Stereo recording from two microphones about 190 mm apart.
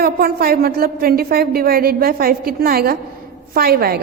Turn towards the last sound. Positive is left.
turn(degrees=-55)  # may be behind; listen again after turning